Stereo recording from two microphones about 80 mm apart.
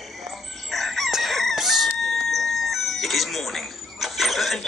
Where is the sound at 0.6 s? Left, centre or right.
Centre.